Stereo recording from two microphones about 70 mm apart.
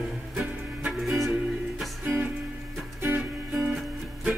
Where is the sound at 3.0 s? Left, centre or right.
Right.